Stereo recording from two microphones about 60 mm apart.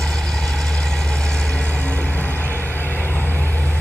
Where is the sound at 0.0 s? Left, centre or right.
Centre; by 3.4 s left.